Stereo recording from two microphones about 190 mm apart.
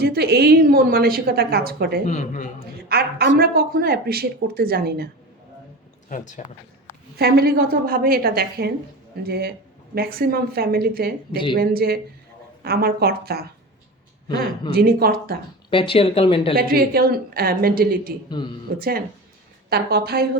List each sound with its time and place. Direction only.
0.0 s speech: 55° right (ahead or behind)
2.0 s a man's voice: 40° left (ahead or behind)
2.9 s speech: 55° right (ahead or behind)
6.1 s a man's voice: 40° left (ahead or behind)
7.2 s speech: 55° right (ahead or behind)
14.3 s speech: 25° left (ahead or behind)
14.7 s speech: 55° right (ahead or behind)
15.7 s speech: 25° left (ahead or behind)
16.6 s speech: 55° right (ahead or behind)
18.3 s speech: 25° left (ahead or behind)
18.8 s speech: 50° right (ahead or behind)